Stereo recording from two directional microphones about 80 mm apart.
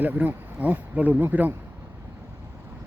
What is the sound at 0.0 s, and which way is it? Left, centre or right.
Speech, right.